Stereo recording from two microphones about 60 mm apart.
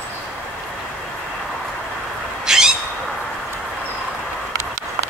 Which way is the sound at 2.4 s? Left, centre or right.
Centre.